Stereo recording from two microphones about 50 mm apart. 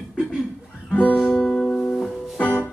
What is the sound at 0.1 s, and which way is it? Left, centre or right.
Chuckle, centre.